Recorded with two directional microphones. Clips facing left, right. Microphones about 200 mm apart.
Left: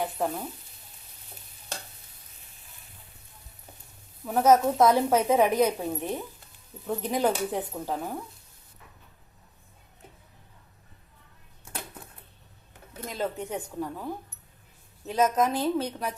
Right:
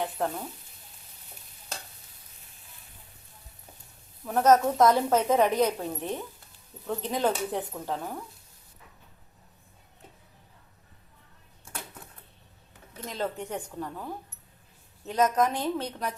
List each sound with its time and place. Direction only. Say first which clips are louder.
0.0 s frying: left 1 dB; 5° left (ahead or behind)
4.3 s a woman's voice: left 1 dB; 10° left (ahead or behind)
13.1 s a woman's voice: left 1 dB; 10° left (ahead or behind)